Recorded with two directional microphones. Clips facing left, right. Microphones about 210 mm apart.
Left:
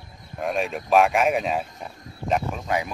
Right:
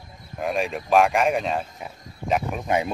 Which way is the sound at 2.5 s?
20° right (ahead or behind).